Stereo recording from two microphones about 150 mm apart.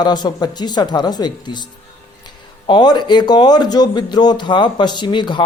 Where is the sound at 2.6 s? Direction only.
30° left (ahead or behind).